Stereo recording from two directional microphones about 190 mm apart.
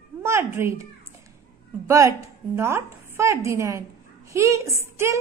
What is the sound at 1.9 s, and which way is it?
A woman's voice, 15° right (ahead or behind).